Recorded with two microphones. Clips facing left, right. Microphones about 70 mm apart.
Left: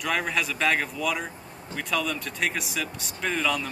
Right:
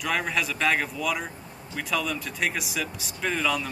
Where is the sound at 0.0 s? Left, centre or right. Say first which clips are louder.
Even; centre.